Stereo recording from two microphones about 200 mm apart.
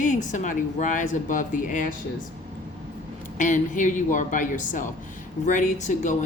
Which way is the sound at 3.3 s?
40° left (ahead or behind).